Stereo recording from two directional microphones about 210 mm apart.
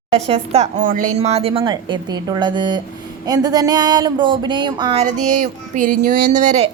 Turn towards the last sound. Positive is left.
turn(degrees=-35)  # may be behind; listen again after turning